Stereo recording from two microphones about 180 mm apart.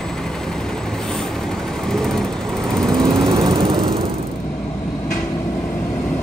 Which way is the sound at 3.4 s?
25° right (ahead or behind).